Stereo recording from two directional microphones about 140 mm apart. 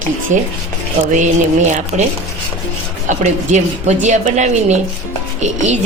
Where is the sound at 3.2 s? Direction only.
55° right (ahead or behind).